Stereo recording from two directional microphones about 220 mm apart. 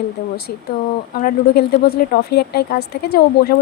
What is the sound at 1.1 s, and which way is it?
Speech, 45° left (ahead or behind).